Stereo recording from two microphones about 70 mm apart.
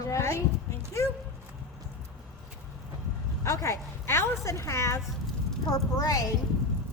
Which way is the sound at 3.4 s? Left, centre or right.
Left.